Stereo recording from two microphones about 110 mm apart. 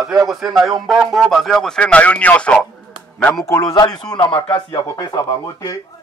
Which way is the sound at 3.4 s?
25° left (ahead or behind).